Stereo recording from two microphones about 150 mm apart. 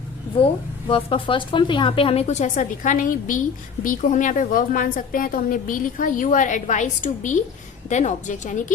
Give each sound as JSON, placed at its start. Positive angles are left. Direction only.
{"t": 0.9, "sound": "a woman's voice", "side_deg": 35}